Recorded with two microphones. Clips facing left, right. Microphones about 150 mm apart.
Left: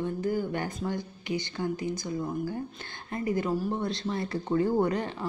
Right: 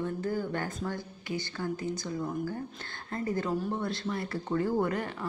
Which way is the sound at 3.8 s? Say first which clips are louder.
Left 2 dB; 20° left (ahead or behind).